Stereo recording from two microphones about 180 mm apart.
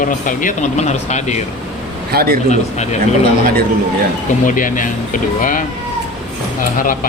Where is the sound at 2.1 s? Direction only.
55° right (ahead or behind).